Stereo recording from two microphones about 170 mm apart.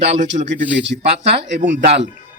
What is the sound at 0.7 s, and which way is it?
Speech, 90° right.